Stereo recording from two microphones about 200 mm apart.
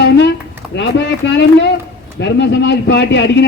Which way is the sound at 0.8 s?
60° left (ahead or behind).